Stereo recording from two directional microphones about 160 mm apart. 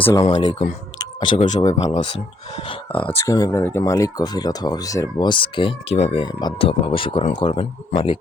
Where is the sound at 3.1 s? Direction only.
20° left (ahead or behind).